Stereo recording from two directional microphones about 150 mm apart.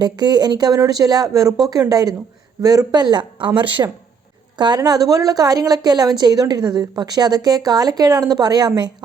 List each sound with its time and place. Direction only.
0.0 s a woman's voice: 30° right (ahead or behind)